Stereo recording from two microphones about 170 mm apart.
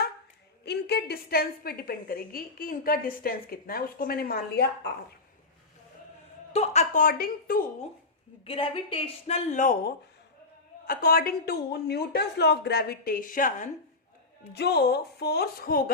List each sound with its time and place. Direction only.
0.6 s a woman's voice: 75° left (ahead or behind)
6.5 s a woman's voice: 40° left (ahead or behind); by 7.6 s 60° left (ahead or behind)
8.4 s a woman's voice: 35° left (ahead or behind); by 13.7 s 50° left (ahead or behind)
14.5 s a woman's voice: 75° left (ahead or behind)